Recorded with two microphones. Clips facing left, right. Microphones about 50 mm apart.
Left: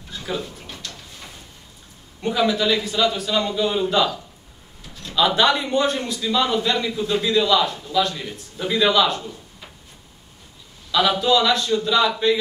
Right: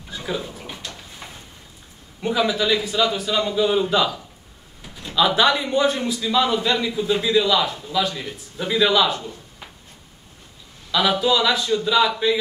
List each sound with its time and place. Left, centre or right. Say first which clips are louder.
0.1 s drawer open or close: right 1 dB; centre
2.2 s a man's voice: left 1 dB; centre
4.8 s a sound: right 2 dB; centre
5.1 s a man's voice: even; centre
10.9 s a man's voice: left 1 dB; centre